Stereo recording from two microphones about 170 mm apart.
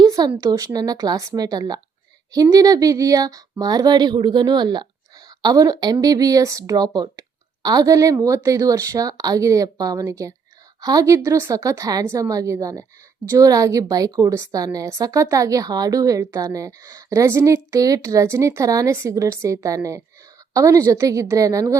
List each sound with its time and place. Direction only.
0.0 s a woman's voice: 25° right (ahead or behind)